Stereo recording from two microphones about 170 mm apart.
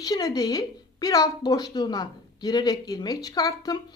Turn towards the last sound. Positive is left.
turn(degrees=20)  # may be behind; listen again after turning